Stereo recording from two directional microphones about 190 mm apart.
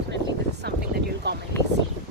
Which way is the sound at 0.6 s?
60° right (ahead or behind).